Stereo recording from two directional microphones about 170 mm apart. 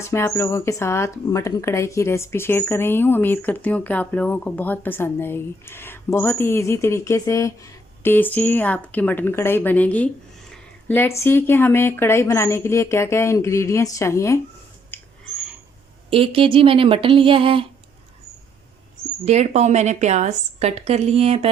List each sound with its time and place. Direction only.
0.0 s speech: 15° left (ahead or behind)
14.9 s a sound: 10° left (ahead or behind)
16.0 s speech: 30° right (ahead or behind)
19.2 s speech: 40° right (ahead or behind)